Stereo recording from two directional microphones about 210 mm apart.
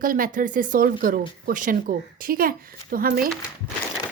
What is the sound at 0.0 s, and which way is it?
A woman's voice, 40° right (ahead or behind).